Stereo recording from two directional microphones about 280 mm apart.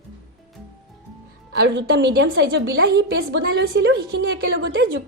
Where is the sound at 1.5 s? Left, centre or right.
Right.